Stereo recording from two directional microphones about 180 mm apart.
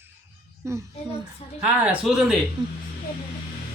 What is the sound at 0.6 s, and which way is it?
A child's voice, 15° right (ahead or behind).